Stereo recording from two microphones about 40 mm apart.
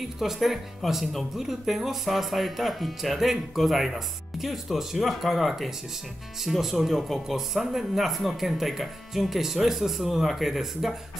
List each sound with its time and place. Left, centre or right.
0.2 s speech: centre